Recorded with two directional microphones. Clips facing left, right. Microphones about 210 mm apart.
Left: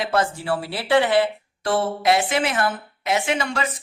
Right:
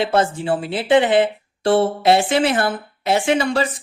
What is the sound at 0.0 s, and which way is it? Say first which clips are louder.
A woman's voice: right 4 dB; 25° right (ahead or behind).